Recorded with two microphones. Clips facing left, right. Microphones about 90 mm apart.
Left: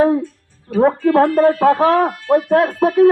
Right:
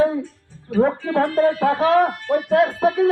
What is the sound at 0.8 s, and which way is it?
Speech, 65° left (ahead or behind).